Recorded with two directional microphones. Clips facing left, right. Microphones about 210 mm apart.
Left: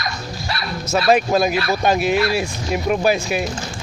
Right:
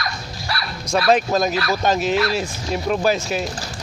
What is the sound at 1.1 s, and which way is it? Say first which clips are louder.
Speech: left 2 dB; 10° left (ahead or behind).